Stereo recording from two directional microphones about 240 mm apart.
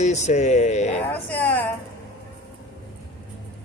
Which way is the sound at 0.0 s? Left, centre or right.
Left.